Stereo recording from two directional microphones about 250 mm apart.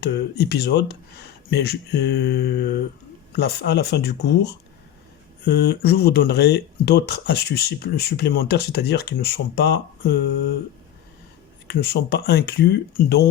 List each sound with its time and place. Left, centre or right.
0.0 s speech: left
5.5 s speech: left
11.7 s speech: left